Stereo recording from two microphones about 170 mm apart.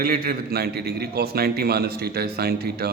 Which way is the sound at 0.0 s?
60° right (ahead or behind).